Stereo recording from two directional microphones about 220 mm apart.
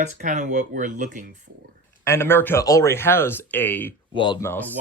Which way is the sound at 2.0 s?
10° left (ahead or behind).